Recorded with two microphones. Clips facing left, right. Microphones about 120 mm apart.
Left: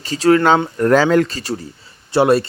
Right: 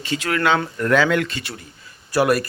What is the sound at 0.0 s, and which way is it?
Speech, 35° left (ahead or behind).